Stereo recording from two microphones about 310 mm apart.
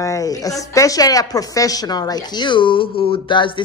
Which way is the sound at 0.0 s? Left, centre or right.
Centre.